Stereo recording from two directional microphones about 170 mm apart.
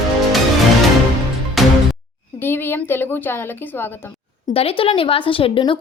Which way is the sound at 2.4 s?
15° left (ahead or behind).